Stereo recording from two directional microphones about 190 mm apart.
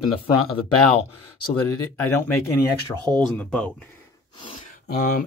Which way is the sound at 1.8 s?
10° left (ahead or behind).